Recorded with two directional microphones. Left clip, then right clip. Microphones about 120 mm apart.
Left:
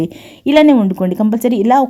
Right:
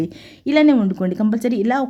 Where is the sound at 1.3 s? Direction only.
30° left (ahead or behind).